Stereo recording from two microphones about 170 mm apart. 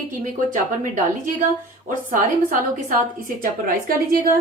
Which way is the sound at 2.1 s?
55° right (ahead or behind).